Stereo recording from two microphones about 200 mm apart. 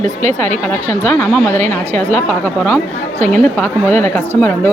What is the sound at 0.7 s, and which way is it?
Speech, 10° left (ahead or behind).